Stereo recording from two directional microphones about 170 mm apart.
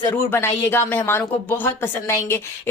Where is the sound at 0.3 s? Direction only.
15° left (ahead or behind).